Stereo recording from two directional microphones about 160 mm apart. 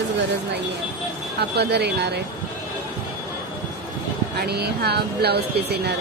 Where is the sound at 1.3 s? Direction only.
90° right.